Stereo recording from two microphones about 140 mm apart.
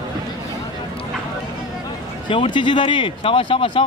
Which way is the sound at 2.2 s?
35° left (ahead or behind).